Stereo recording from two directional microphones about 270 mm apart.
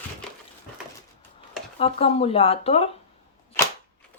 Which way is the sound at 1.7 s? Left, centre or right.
Left.